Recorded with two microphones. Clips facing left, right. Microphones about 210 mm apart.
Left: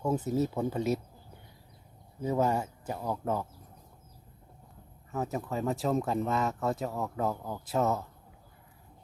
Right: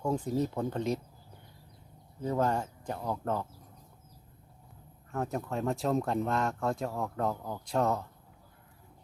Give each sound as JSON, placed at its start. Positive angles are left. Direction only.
{"t": 0.0, "sound": "speech", "side_deg": 5}
{"t": 2.2, "sound": "speech", "side_deg": 10}
{"t": 5.1, "sound": "speech", "side_deg": 0}